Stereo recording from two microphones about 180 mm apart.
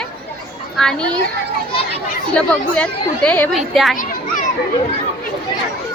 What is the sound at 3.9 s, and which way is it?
Children playing, 50° left (ahead or behind).